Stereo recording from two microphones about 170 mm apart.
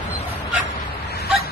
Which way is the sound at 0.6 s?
65° left (ahead or behind).